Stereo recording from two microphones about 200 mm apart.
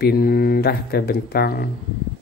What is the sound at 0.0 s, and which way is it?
Speech, 50° left (ahead or behind).